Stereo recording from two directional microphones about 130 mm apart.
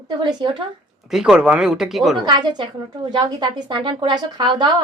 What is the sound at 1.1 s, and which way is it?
Speech, 5° right (ahead or behind).